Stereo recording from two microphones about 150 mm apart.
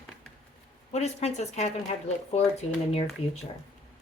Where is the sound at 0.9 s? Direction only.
45° left (ahead or behind).